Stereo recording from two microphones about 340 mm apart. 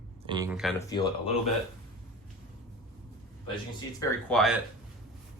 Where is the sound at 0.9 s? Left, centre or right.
Centre.